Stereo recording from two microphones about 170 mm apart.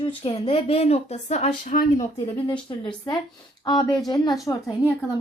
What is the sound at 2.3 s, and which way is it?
Speech, 30° left (ahead or behind).